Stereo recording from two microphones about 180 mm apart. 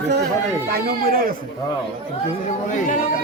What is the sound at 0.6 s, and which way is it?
Speech, 60° right (ahead or behind).